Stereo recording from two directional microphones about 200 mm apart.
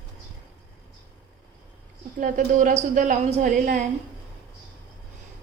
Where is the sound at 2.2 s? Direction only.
40° right (ahead or behind).